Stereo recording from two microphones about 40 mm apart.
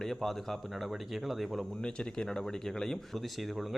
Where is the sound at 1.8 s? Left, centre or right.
Centre.